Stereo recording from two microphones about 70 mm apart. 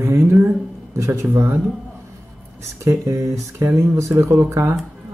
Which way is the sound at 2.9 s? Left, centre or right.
Right.